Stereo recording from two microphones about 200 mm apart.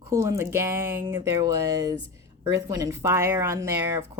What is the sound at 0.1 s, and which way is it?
Speech, 15° right (ahead or behind).